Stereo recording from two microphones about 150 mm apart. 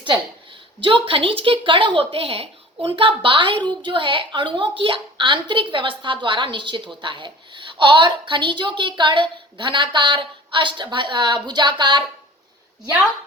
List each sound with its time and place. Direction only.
0.8 s a woman's voice: 35° right (ahead or behind)